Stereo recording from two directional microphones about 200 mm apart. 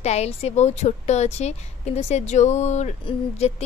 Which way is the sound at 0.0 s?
35° left (ahead or behind).